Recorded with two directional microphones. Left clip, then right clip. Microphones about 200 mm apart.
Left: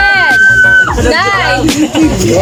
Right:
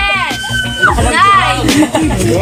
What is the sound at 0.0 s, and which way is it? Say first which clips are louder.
Music: left 8 dB; 30° left (ahead or behind).